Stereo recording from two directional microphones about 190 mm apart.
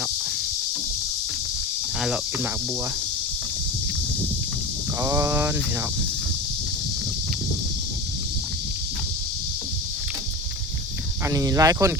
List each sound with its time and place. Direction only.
2.0 s speech: centre (ahead or behind)
4.9 s speech: 15° right (ahead or behind)
11.3 s speech: 15° right (ahead or behind)